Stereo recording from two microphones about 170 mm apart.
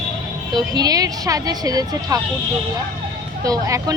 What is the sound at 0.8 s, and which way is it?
Speech, 20° right (ahead or behind).